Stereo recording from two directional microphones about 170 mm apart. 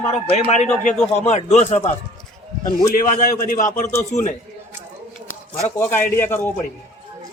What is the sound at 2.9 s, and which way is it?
A man's voice, 50° left (ahead or behind).